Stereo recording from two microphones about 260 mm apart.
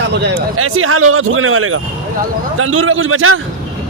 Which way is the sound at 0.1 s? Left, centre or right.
Right.